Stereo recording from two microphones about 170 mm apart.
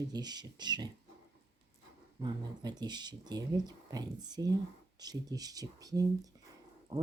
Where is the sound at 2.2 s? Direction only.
25° right (ahead or behind).